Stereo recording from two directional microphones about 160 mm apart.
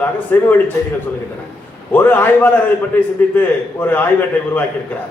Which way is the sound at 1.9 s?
10° left (ahead or behind).